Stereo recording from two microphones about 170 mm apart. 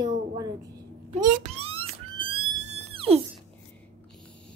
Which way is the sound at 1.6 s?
35° right (ahead or behind).